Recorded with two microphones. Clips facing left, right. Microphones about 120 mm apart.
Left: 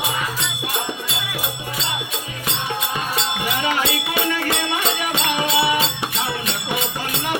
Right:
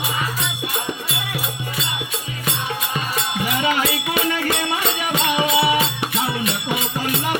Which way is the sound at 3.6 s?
25° left (ahead or behind).